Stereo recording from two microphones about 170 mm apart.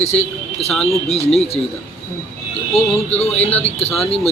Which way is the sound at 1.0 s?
35° left (ahead or behind).